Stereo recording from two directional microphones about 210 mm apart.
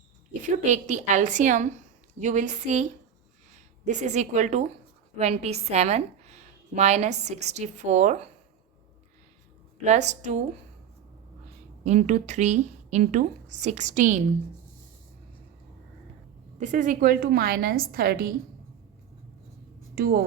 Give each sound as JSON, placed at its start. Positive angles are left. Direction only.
{"t": 0.4, "sound": "a woman's voice", "side_deg": -35}
{"t": 3.8, "sound": "a woman's voice", "side_deg": -35}
{"t": 9.7, "sound": "a woman's voice", "side_deg": -35}
{"t": 11.8, "sound": "a woman's voice", "side_deg": -35}
{"t": 16.6, "sound": "a woman's voice", "side_deg": -35}
{"t": 20.0, "sound": "a woman's voice", "side_deg": -45}